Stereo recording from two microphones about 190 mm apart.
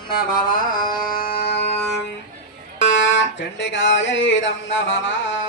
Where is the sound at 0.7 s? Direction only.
45° left (ahead or behind).